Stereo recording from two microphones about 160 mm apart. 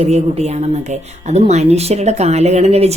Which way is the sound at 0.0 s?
40° right (ahead or behind).